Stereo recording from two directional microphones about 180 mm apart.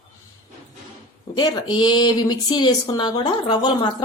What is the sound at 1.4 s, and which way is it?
Speech, 25° left (ahead or behind).